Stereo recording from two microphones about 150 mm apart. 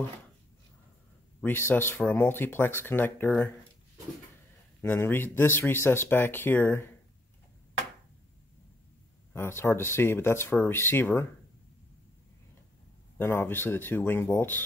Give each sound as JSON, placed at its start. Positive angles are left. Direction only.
{"t": 1.4, "sound": "speech", "side_deg": 15}
{"t": 4.8, "sound": "speech", "side_deg": 15}
{"t": 9.3, "sound": "speech", "side_deg": 15}
{"t": 13.2, "sound": "speech", "side_deg": 15}